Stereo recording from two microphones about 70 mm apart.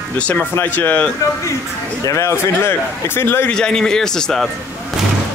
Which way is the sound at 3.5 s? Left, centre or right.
Centre.